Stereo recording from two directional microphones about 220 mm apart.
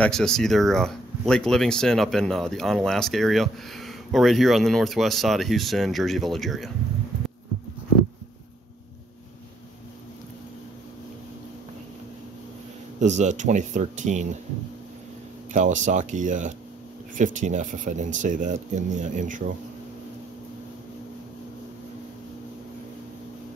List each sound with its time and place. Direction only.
0.0 s speech: 5° left (ahead or behind)
13.0 s speech: 30° right (ahead or behind)
15.5 s speech: 35° right (ahead or behind)